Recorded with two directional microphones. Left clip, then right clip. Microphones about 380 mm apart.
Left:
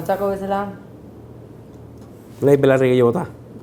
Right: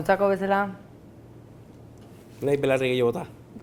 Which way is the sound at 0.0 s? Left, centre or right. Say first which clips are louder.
Left 1 dB; right.